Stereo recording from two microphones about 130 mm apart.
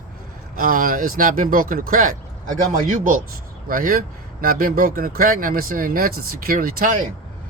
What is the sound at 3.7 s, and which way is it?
Speech, 90° right.